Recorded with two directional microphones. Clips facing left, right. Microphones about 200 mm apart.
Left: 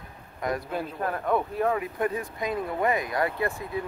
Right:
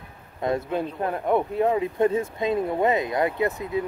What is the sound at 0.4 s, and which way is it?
Speech, 25° right (ahead or behind).